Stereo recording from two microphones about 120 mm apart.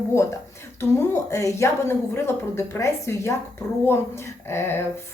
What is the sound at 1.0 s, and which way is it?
A woman's voice, 25° left (ahead or behind).